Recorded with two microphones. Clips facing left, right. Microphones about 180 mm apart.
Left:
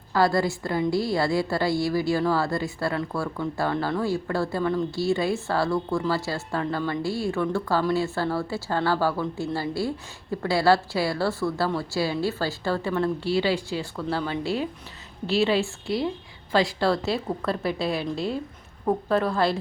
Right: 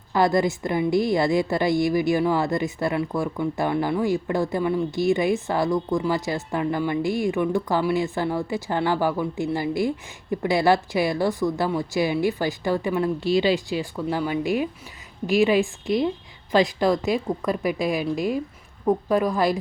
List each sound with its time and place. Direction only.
0.1 s a woman's voice: 20° right (ahead or behind)